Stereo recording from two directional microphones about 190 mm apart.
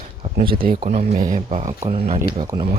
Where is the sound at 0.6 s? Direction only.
45° right (ahead or behind).